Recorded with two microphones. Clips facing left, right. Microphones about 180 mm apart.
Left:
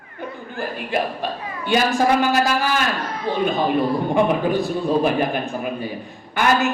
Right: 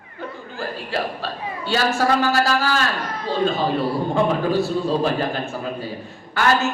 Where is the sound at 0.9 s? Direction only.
15° left (ahead or behind).